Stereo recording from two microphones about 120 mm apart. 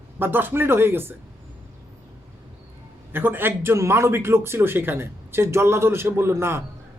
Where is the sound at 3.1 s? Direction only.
15° right (ahead or behind).